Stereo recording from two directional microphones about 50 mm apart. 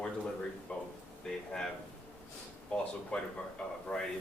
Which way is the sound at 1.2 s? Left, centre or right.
Centre.